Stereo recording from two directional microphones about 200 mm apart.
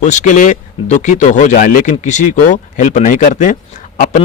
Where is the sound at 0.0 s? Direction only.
40° left (ahead or behind).